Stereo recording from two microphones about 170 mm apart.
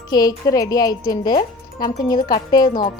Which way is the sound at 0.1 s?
20° left (ahead or behind).